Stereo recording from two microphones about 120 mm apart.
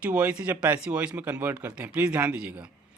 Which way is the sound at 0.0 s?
10° right (ahead or behind).